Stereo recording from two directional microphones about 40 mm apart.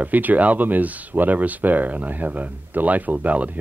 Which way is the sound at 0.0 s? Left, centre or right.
Right.